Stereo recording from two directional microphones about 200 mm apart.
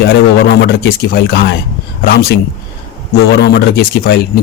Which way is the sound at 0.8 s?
55° left (ahead or behind).